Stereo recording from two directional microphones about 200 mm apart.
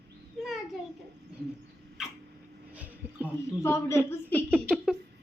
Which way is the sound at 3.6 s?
15° left (ahead or behind).